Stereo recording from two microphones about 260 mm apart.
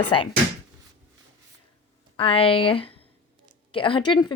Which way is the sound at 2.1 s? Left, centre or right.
Left.